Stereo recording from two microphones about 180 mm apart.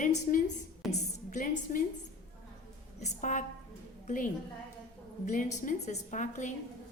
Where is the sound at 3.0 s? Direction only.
45° left (ahead or behind).